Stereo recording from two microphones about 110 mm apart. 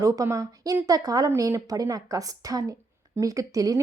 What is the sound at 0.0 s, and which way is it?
Speech, 30° right (ahead or behind).